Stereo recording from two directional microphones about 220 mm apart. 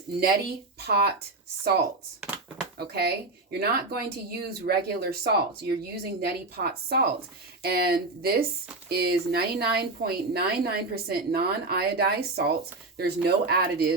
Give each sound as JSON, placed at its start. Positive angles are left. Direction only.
{"t": 0.2, "sound": "a woman's voice", "side_deg": -45}